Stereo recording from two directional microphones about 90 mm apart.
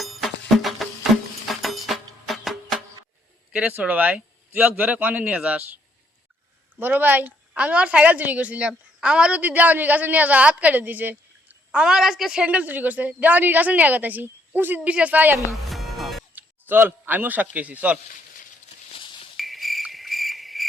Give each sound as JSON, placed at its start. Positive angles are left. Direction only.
{"t": 0.0, "sound": "music", "side_deg": 0}
{"t": 3.5, "sound": "a woman's voice", "side_deg": -15}
{"t": 6.7, "sound": "a woman's voice", "side_deg": -20}
{"t": 15.7, "sound": "music", "side_deg": 0}
{"t": 16.3, "sound": "a man's voice", "side_deg": -25}
{"t": 19.4, "sound": "cricket", "side_deg": 0}